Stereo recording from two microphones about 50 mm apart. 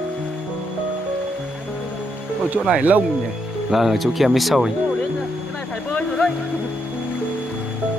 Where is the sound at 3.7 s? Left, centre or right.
Centre.